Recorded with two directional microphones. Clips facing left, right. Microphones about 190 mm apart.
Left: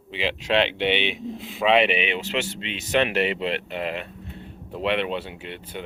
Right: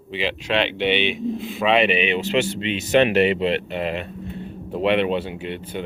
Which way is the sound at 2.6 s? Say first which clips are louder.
Right 8 dB; 5° right (ahead or behind).